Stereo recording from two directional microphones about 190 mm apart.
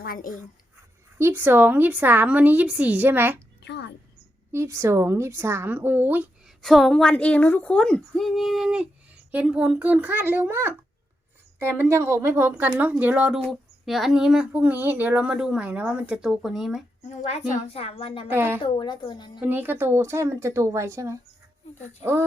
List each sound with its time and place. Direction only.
0.0 s speech: 50° left (ahead or behind)
1.2 s a woman's voice: 10° right (ahead or behind)
3.6 s a sound: 65° left (ahead or behind)
4.5 s a woman's voice: 15° right (ahead or behind)
6.6 s a woman's voice: centre (ahead or behind)
17.2 s a woman's voice: 35° left (ahead or behind)
18.3 s a woman's voice: 10° right (ahead or behind)
18.6 s speech: 25° left (ahead or behind)
19.4 s a woman's voice: 10° right (ahead or behind)